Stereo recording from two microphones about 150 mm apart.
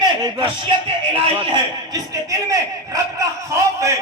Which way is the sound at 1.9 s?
20° right (ahead or behind).